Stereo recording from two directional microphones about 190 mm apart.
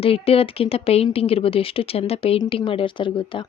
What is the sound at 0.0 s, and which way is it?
A woman's voice, 30° left (ahead or behind).